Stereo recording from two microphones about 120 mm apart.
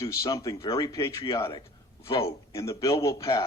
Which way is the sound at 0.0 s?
25° left (ahead or behind).